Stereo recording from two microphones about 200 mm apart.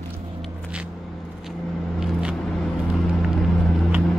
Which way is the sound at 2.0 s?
Centre (ahead or behind).